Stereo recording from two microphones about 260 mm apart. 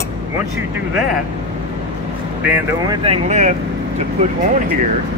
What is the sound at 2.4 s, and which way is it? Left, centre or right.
Speech, centre.